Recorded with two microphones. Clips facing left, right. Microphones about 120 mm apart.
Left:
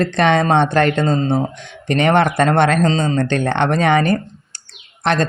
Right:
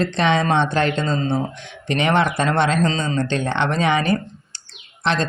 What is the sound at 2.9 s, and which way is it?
Speech, 40° left (ahead or behind).